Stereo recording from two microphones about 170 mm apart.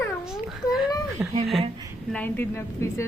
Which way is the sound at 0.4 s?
5° right (ahead or behind).